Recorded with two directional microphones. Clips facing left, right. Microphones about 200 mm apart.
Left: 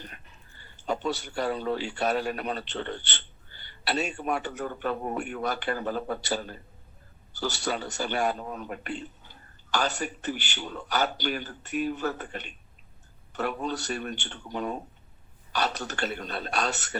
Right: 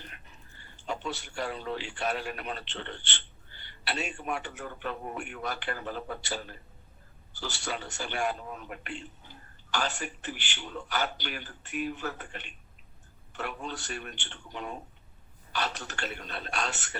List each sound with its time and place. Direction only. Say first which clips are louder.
0.9 s a man's voice: left 6 dB; 40° left (ahead or behind)